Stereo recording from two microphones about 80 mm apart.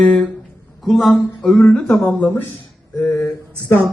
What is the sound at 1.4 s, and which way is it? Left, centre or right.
Speech, centre.